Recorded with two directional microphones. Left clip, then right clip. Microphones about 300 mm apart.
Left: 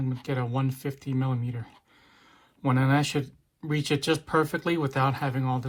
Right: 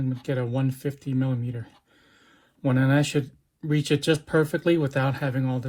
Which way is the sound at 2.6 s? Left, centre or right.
Centre.